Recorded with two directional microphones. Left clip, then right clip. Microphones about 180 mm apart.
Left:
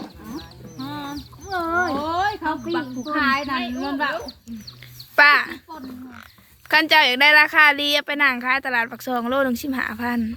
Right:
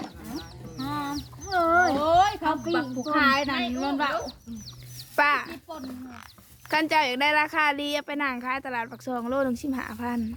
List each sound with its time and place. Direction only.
0.9 s chicken: 15° right (ahead or behind)
1.5 s a sound: 15° right (ahead or behind)
2.0 s a sound: 40° right (ahead or behind)
3.1 s a child's voice: 40° right (ahead or behind)
5.1 s a woman's voice: 5° right (ahead or behind)
6.7 s a woman's voice: 10° right (ahead or behind)